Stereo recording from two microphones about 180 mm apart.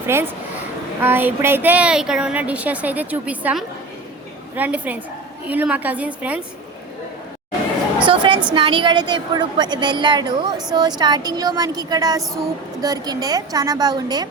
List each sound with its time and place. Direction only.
0.0 s a woman's voice: 15° right (ahead or behind)
8.0 s a woman's voice: 30° right (ahead or behind)